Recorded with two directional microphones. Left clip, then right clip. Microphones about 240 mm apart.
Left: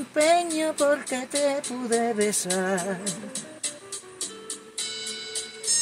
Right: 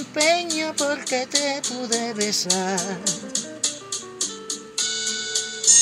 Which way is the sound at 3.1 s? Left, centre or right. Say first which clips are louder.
Right 8 dB; right.